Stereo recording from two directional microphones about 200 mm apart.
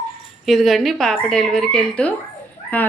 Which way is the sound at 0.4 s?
Centre (ahead or behind).